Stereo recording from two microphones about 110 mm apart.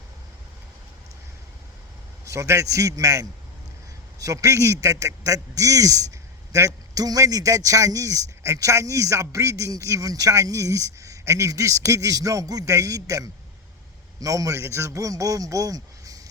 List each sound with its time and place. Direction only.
2.2 s a man's voice: 30° right (ahead or behind)